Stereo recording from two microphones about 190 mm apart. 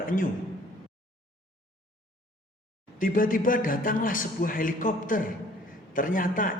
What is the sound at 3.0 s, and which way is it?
A man's voice, 45° left (ahead or behind).